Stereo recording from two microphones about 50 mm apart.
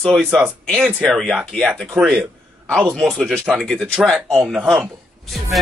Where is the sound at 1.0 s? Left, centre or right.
Centre.